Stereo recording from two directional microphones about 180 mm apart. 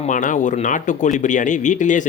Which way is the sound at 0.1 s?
45° left (ahead or behind).